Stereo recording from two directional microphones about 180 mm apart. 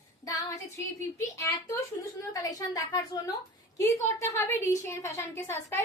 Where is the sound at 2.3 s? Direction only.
20° left (ahead or behind).